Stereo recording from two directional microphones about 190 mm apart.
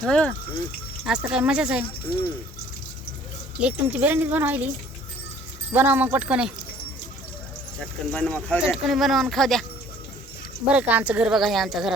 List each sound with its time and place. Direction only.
0.0 s speech: 5° left (ahead or behind)
3.6 s speech: 5° right (ahead or behind)
5.7 s speech: 10° right (ahead or behind)
8.1 s speech: 5° left (ahead or behind)
10.7 s speech: 5° right (ahead or behind)